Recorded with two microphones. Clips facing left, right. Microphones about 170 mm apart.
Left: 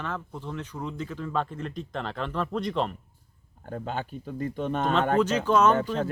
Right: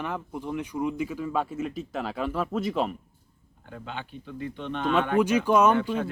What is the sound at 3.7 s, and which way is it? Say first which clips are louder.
Speech: left 5 dB; 45° left (ahead or behind).